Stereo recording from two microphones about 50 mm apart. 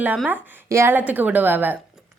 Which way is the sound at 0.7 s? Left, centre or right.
Right.